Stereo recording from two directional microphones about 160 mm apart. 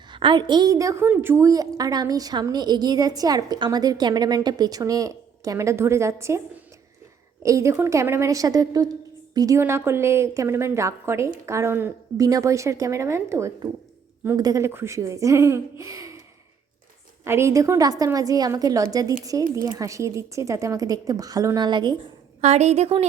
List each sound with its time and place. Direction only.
0.1 s a woman's voice: 30° right (ahead or behind)
7.4 s a woman's voice: 20° right (ahead or behind)
17.2 s a woman's voice: 15° right (ahead or behind)
22.4 s a woman's voice: 45° right (ahead or behind)